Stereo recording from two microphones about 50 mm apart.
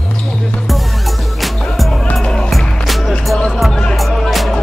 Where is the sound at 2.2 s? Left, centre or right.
Centre.